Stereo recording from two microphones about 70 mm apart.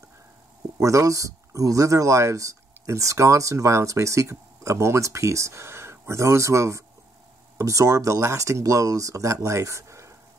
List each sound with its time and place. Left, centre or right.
0.7 s speech: right